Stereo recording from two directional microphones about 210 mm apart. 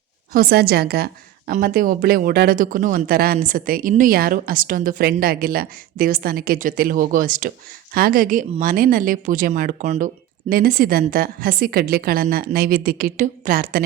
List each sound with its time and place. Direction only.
0.3 s a woman's voice: 45° right (ahead or behind)